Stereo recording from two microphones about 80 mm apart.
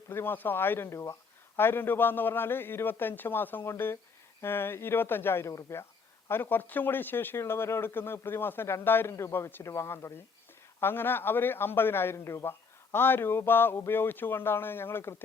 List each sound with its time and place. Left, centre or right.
0.1 s speech: left
6.2 s speech: left